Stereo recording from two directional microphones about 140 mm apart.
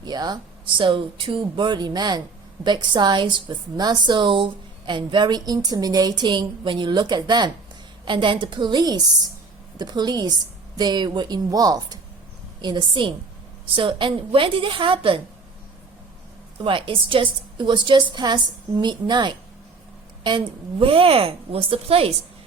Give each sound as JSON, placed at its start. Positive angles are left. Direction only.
{"t": 0.0, "sound": "a woman's voice", "side_deg": -30}
{"t": 16.6, "sound": "a woman's voice", "side_deg": -40}